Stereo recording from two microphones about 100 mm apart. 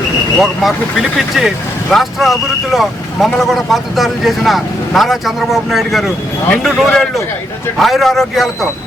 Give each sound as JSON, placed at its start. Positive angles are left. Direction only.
{"t": 0.3, "sound": "speech", "side_deg": 0}